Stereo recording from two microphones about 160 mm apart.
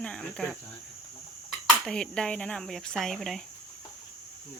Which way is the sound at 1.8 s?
5° left (ahead or behind).